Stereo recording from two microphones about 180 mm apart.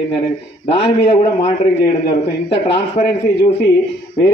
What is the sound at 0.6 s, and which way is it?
Speech, 35° left (ahead or behind).